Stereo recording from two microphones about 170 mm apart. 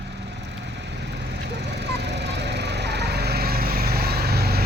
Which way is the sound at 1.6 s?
80° right.